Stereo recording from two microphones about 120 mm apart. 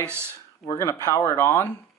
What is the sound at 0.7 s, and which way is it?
Speech, 25° left (ahead or behind).